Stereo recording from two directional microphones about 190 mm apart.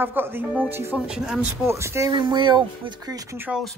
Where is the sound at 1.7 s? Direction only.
15° right (ahead or behind).